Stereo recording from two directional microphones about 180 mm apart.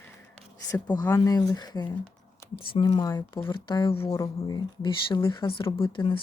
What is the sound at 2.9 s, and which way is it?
Speech, 20° left (ahead or behind).